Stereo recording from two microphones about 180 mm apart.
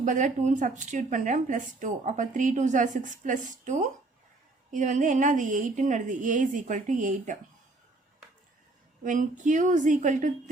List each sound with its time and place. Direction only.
0.0 s speech: 45° right (ahead or behind)
9.0 s speech: 45° right (ahead or behind)